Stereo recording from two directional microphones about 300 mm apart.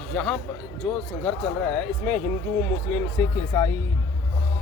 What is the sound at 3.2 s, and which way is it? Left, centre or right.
Speech, centre.